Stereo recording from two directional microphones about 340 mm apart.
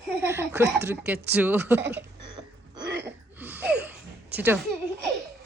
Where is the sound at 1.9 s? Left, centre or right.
Centre.